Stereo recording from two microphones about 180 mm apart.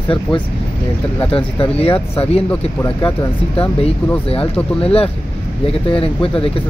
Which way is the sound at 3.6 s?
35° left (ahead or behind).